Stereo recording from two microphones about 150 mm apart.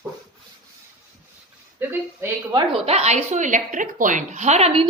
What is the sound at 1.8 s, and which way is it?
Speech, 15° right (ahead or behind).